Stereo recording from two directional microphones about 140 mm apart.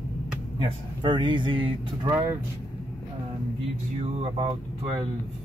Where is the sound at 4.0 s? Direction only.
45° right (ahead or behind).